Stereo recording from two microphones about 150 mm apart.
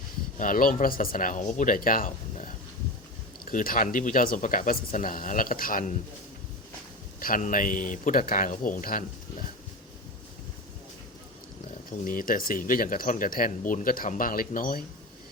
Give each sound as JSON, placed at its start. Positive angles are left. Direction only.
{"t": 0.3, "sound": "speech", "side_deg": 65}
{"t": 3.4, "sound": "speech", "side_deg": 70}
{"t": 7.2, "sound": "speech", "side_deg": 65}
{"t": 11.9, "sound": "speech", "side_deg": 65}